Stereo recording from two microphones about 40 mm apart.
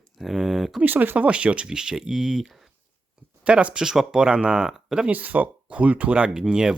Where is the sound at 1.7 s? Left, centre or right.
Centre.